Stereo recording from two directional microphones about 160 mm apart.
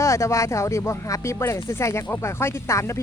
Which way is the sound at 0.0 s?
20° left (ahead or behind).